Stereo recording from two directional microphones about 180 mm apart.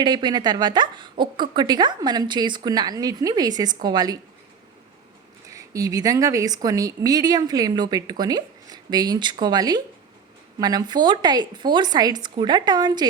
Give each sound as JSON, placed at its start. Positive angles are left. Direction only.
{"t": 0.0, "sound": "a woman's voice", "side_deg": -25}
{"t": 5.5, "sound": "a woman's voice", "side_deg": -20}